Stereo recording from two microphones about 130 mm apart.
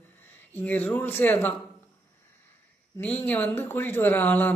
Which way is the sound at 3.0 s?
15° left (ahead or behind).